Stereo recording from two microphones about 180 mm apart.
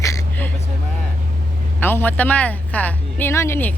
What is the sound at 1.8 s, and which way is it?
Speech, 10° left (ahead or behind).